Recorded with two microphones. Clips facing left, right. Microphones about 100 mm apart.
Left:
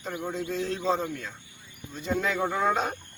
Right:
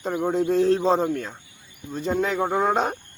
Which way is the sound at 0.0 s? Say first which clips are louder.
Right 9 dB; 35° right (ahead or behind).